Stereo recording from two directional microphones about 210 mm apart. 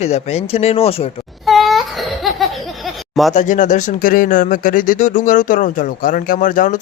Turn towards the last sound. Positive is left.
turn(degrees=40)  # may be behind; listen again after turning